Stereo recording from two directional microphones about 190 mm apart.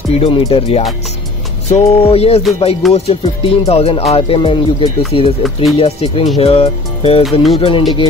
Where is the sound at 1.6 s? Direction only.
35° left (ahead or behind).